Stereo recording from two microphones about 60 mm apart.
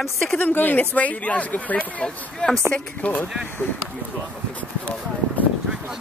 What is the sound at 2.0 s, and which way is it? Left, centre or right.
Speech, centre.